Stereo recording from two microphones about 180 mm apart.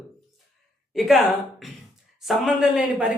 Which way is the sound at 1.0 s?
Centre (ahead or behind).